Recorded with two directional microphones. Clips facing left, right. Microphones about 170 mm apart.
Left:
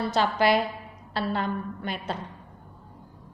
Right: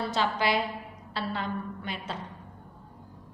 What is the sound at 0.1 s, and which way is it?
A woman's voice, 45° left (ahead or behind).